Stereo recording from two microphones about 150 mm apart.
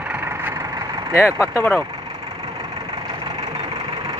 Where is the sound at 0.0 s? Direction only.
10° right (ahead or behind).